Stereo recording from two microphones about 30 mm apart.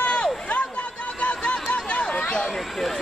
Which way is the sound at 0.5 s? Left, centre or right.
Left.